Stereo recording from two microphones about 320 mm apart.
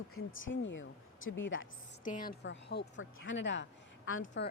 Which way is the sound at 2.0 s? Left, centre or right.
Left.